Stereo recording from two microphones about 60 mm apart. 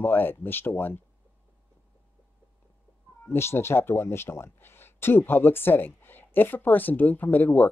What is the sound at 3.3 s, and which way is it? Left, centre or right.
Speech, left.